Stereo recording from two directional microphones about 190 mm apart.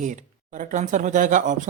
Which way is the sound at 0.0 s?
40° right (ahead or behind).